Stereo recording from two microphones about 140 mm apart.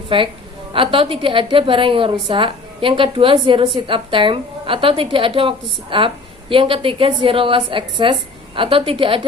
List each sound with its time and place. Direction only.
0.1 s a woman's voice: 40° right (ahead or behind)